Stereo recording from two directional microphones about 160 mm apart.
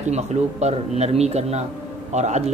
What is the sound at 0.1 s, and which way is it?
Speech, 45° right (ahead or behind).